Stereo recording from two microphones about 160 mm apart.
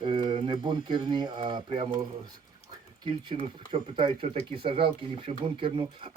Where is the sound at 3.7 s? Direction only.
30° right (ahead or behind).